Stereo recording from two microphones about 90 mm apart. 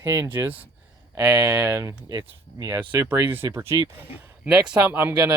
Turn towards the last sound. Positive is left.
turn(degrees=-15)  # may be behind; listen again after turning